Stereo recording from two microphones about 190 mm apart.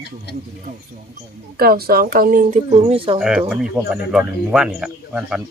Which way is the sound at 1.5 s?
55° right (ahead or behind).